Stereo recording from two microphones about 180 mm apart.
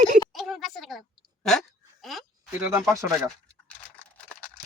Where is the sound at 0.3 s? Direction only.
Centre (ahead or behind).